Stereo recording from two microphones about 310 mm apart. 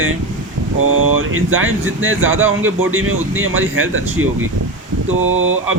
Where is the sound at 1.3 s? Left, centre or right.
Right.